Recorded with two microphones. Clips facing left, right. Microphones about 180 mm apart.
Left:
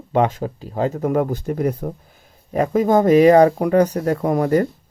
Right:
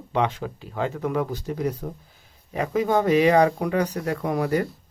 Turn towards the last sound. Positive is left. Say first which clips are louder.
# left 6 dB
turn(degrees=45)  # may be behind; listen again after turning